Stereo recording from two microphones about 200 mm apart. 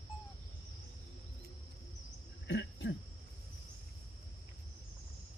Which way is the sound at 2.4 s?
60° left (ahead or behind).